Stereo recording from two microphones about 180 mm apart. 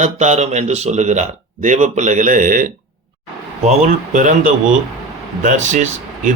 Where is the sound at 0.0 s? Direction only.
40° right (ahead or behind).